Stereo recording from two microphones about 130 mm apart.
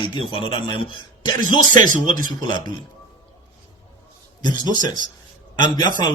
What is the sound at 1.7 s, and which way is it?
Speech, 90° right.